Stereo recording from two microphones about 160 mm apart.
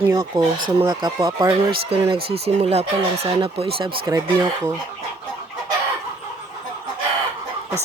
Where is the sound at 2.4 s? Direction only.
40° right (ahead or behind).